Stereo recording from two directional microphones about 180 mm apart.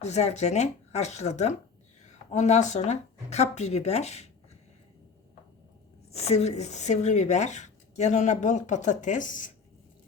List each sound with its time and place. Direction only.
0.0 s speech: 40° left (ahead or behind)
6.1 s speech: 35° left (ahead or behind)